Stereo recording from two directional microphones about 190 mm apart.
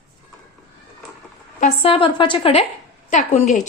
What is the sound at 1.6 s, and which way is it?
A woman's voice, 30° left (ahead or behind).